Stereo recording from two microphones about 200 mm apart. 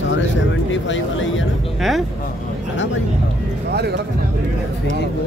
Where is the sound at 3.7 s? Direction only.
55° right (ahead or behind).